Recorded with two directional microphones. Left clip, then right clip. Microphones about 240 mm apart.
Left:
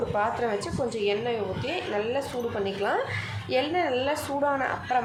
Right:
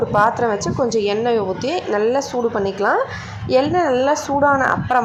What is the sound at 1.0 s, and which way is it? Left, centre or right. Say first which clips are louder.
A woman's voice: right 9 dB; right.